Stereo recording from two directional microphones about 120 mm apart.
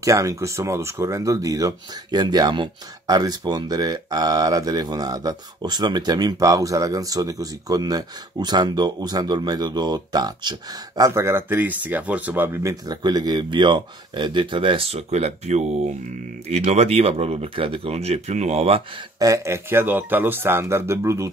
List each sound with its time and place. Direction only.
0.0 s speech: 25° right (ahead or behind); by 18.8 s 60° right (ahead or behind)
19.1 s speech: 30° right (ahead or behind)